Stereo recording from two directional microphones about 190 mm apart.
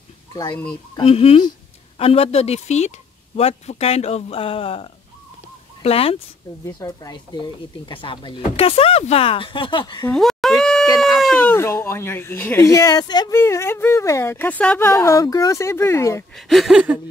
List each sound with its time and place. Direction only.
0.3 s speech: 20° left (ahead or behind)
0.9 s speech: 30° left (ahead or behind)
6.6 s speech: 20° left (ahead or behind)
10.1 s a sound: centre (ahead or behind)
11.0 s speech: centre (ahead or behind)
16.3 s a sound: centre (ahead or behind)